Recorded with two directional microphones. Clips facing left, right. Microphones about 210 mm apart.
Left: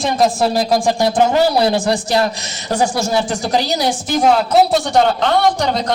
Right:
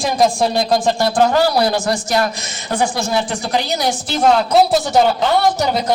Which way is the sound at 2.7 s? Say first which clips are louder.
Left 2 dB; 40° left (ahead or behind).